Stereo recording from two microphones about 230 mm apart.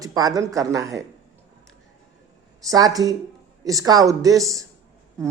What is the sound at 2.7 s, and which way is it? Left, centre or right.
A woman's voice, centre.